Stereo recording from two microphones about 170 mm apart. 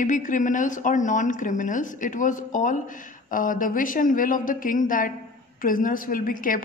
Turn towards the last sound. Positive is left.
turn(degrees=55)  # may be behind; listen again after turning